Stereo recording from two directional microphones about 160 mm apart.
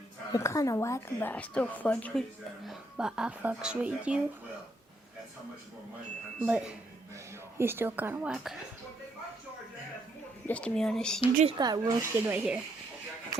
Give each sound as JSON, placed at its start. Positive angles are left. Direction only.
{"t": 0.3, "sound": "a woman's voice", "side_deg": 20}
{"t": 2.6, "sound": "speech", "side_deg": -5}
{"t": 6.4, "sound": "speech", "side_deg": -5}
{"t": 10.4, "sound": "speech", "side_deg": 10}
{"t": 11.4, "sound": "speech", "side_deg": -25}
{"t": 12.2, "sound": "speech", "side_deg": -15}